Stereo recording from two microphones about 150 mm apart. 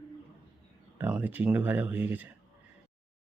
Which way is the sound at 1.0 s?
10° right (ahead or behind).